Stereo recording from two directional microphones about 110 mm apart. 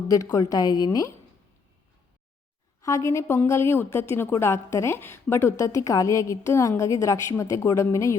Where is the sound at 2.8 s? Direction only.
25° left (ahead or behind).